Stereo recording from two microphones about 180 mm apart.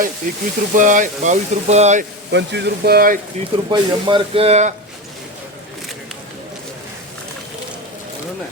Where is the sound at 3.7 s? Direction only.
25° right (ahead or behind).